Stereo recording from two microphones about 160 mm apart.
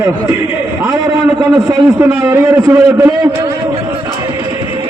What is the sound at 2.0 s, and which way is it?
A man's voice, 15° right (ahead or behind).